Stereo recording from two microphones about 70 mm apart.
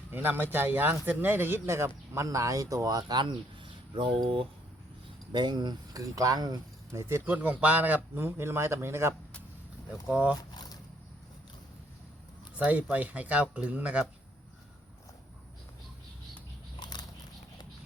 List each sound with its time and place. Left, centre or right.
0.1 s speech: right
5.4 s speech: right
6.0 s speech: right
6.9 s speech: right
7.3 s speech: right
10.1 s speech: centre
12.5 s speech: right
16.8 s a sound: left